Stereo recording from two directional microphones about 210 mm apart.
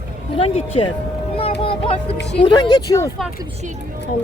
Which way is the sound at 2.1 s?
55° left (ahead or behind).